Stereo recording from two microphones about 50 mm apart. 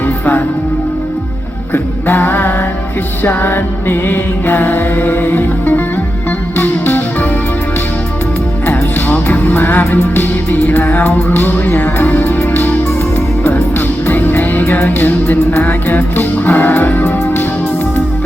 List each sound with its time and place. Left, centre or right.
1.7 s music: left
8.6 s music: left